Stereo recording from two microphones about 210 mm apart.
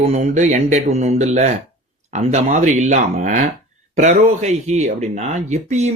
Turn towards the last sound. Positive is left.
turn(degrees=-35)  # may be behind; listen again after turning